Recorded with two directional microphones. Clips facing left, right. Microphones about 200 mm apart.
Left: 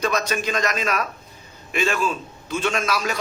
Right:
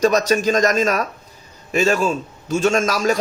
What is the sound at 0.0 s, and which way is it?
A man's voice, 40° right (ahead or behind).